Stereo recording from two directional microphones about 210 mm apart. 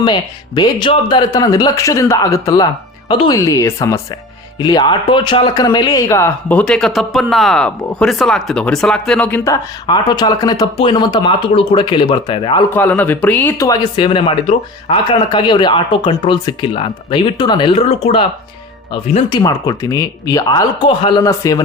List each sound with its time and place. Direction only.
0.0 s speech: 20° left (ahead or behind)
12.7 s speech: 10° left (ahead or behind)